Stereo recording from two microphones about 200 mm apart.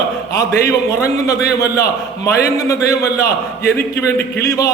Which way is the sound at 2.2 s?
15° left (ahead or behind).